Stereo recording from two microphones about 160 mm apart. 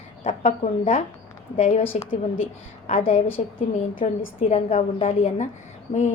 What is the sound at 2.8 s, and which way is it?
A woman's voice, 45° left (ahead or behind).